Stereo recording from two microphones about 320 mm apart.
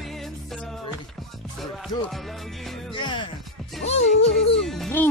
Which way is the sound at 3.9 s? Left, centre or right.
Centre.